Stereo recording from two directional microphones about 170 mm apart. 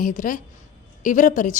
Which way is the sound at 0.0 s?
50° left (ahead or behind).